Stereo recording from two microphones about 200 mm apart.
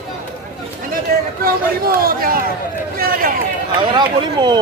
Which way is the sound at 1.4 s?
45° right (ahead or behind).